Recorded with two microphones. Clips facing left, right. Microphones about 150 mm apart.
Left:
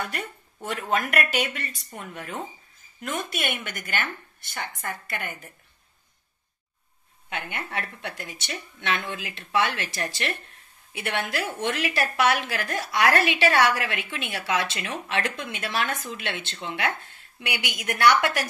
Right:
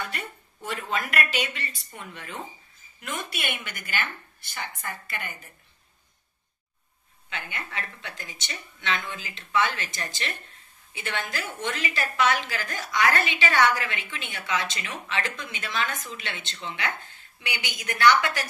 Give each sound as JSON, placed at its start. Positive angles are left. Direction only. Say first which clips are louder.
{"t": 0.8, "sound": "speech", "louder": "left 4 dB", "side_deg": 50}
{"t": 7.4, "sound": "a woman's voice", "louder": "left 3 dB", "side_deg": 65}